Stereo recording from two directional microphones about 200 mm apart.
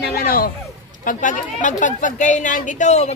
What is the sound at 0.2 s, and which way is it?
A woman's voice, 45° left (ahead or behind).